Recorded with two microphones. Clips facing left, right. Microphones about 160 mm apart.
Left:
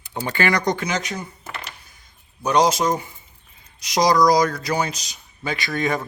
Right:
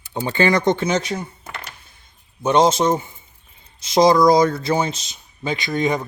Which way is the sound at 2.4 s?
25° right (ahead or behind).